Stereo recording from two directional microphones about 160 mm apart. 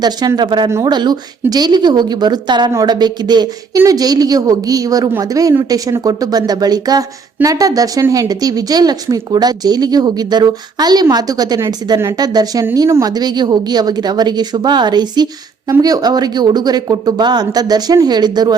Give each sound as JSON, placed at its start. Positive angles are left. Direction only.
{"t": 0.0, "sound": "a woman's voice", "side_deg": -25}